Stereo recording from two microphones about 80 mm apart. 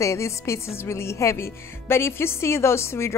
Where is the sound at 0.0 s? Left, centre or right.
Left.